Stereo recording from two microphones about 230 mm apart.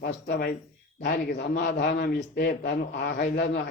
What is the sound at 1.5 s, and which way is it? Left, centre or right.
A man's voice, left.